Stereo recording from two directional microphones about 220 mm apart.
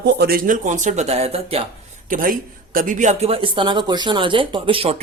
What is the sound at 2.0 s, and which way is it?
Speech, 40° right (ahead or behind).